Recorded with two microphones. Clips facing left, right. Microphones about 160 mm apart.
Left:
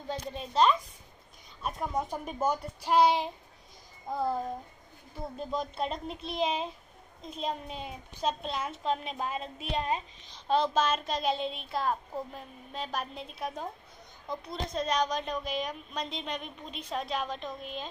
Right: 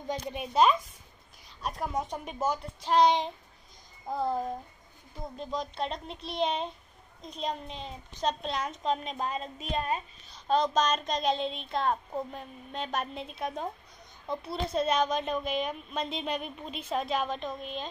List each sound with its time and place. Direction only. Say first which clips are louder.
0.1 s speech: right 2 dB; 15° right (ahead or behind)
1.6 s a woman's voice: even; centre (ahead or behind)
5.4 s a woman's voice: left 1 dB; 5° left (ahead or behind); by 10.0 s 20° left (ahead or behind)
10.7 s a woman's voice: right 1 dB; 5° left (ahead or behind)